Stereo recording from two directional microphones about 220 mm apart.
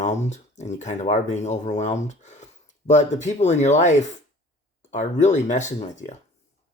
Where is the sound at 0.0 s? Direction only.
30° left (ahead or behind).